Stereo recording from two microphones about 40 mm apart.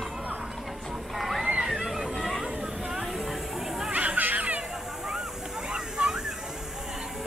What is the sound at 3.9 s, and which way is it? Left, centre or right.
Music, right.